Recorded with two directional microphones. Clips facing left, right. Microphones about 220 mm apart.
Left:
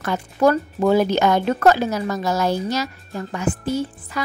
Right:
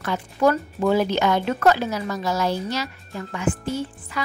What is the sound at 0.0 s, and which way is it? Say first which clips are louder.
Speech: left 2 dB; 45° left (ahead or behind).